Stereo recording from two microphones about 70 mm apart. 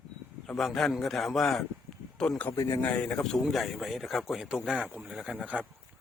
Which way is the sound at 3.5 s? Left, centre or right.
Centre.